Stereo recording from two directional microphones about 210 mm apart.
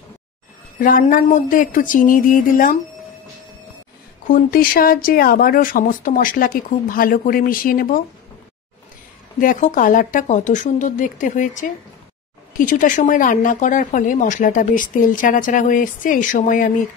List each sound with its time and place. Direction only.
0.7 s speech: 40° left (ahead or behind)
4.3 s speech: 45° left (ahead or behind)
9.4 s speech: 40° left (ahead or behind)